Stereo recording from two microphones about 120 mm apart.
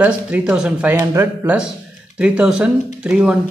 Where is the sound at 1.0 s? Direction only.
25° right (ahead or behind).